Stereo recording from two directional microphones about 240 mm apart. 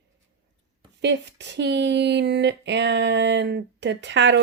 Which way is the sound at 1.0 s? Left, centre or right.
Right.